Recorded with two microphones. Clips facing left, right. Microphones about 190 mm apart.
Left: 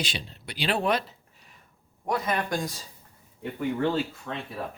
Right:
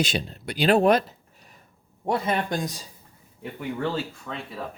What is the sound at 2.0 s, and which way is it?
Speech, 30° right (ahead or behind).